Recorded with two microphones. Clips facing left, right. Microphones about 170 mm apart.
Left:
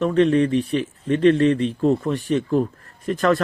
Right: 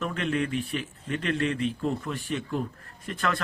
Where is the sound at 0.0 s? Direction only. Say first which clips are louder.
Left 12 dB; 35° left (ahead or behind).